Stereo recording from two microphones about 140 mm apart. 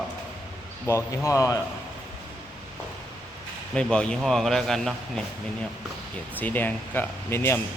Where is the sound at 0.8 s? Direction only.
20° left (ahead or behind).